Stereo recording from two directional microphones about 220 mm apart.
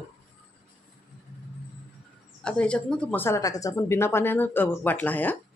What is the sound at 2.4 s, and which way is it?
Speech, 5° left (ahead or behind).